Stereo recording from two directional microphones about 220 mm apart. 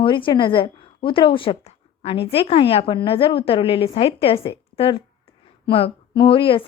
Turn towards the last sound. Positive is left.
turn(degrees=25)  # may be behind; listen again after turning